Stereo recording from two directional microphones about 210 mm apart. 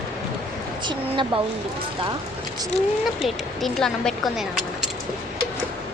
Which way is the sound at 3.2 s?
Centre (ahead or behind).